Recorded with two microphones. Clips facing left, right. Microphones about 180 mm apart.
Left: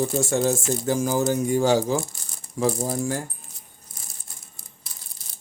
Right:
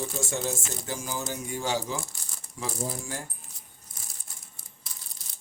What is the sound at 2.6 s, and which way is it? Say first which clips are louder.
Speech: left 10 dB; 45° left (ahead or behind).